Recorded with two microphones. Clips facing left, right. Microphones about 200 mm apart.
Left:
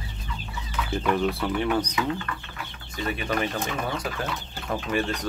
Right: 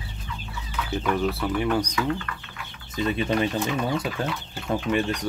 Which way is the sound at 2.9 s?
25° right (ahead or behind).